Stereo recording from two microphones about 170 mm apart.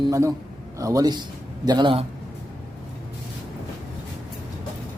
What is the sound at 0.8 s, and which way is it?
Speech, 20° right (ahead or behind).